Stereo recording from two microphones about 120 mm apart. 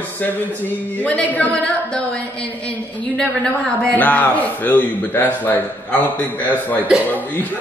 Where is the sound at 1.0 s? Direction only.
10° left (ahead or behind).